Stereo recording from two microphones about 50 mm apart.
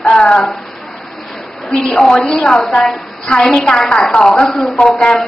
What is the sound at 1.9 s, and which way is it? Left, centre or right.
A woman's voice, centre.